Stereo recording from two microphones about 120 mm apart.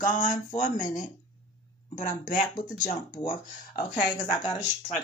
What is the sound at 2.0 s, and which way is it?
Speech, 90° left.